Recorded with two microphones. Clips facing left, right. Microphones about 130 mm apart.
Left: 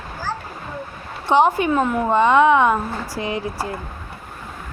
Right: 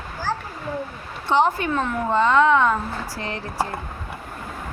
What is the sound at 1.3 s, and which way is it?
A woman's voice, 15° left (ahead or behind).